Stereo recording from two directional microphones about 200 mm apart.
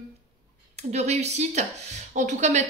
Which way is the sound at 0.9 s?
35° right (ahead or behind).